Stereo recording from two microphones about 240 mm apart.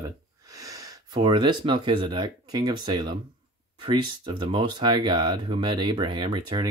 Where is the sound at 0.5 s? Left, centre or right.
Centre.